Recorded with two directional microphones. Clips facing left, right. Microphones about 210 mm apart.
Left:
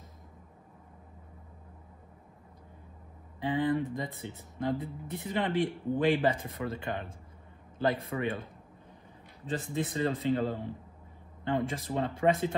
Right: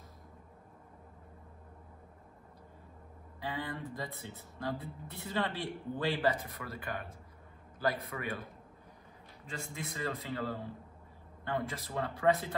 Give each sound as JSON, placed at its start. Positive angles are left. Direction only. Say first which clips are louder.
{"t": 3.3, "sound": "speech", "louder": "left 11 dB", "side_deg": 20}
{"t": 9.5, "sound": "speech", "louder": "left 10 dB", "side_deg": 30}